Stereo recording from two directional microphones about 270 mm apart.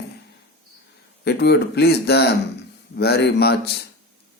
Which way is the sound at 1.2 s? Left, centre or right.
Left.